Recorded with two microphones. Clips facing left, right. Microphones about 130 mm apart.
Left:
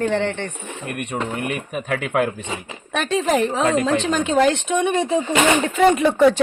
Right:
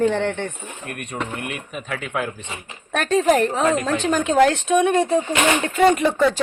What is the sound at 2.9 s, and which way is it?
A woman's voice, centre (ahead or behind).